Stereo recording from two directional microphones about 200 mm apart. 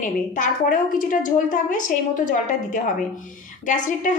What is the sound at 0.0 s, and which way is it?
A woman's voice, 40° left (ahead or behind).